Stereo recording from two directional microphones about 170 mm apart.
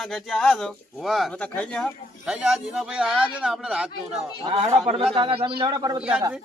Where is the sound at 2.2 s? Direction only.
5° right (ahead or behind).